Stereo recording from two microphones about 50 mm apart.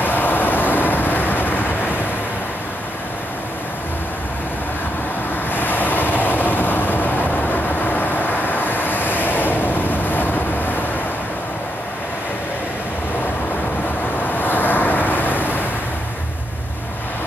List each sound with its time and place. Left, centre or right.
0.0 s vehicle: left
5.5 s vehicle: left
14.2 s vehicle: left